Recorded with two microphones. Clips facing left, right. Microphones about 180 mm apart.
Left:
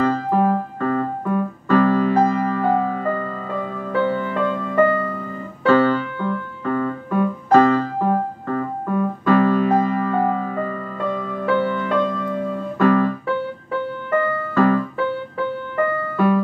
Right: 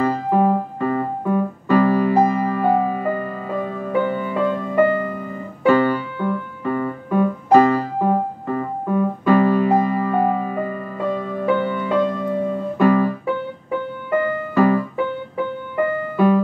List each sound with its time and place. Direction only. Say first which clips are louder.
0.0 s keyboard: right 1 dB; 15° right (ahead or behind)
13.7 s music: right 2 dB; 15° right (ahead or behind)